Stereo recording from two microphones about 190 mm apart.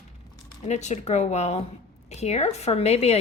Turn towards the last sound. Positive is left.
turn(degrees=35)  # may be behind; listen again after turning